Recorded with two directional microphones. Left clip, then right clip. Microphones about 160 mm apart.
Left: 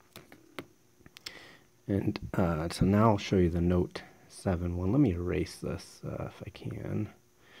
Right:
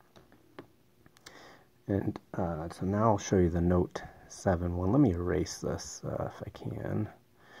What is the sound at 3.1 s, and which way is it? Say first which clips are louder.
Speech: right 1 dB; 20° left (ahead or behind).